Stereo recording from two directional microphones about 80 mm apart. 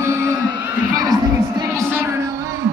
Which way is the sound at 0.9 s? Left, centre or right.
Right.